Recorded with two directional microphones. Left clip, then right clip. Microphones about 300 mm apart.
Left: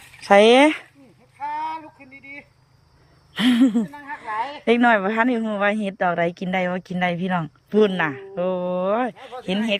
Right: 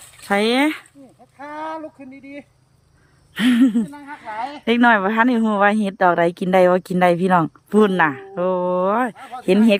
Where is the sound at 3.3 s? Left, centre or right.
Centre.